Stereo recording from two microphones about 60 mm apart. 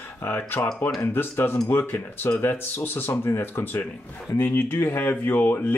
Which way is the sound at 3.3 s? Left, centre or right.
Left.